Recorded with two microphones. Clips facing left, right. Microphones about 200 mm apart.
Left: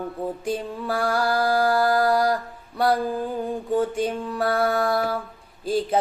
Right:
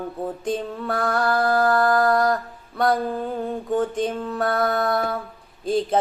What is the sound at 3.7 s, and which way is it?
Music, 10° left (ahead or behind).